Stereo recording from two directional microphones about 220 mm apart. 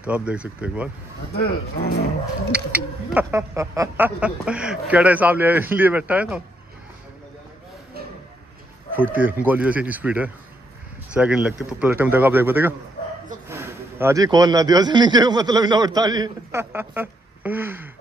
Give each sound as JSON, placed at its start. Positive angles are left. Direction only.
{"t": 0.0, "sound": "speech", "side_deg": -5}
{"t": 1.3, "sound": "speech", "side_deg": 45}
{"t": 2.5, "sound": "a man's voice", "side_deg": -5}
{"t": 8.9, "sound": "a man's voice", "side_deg": -10}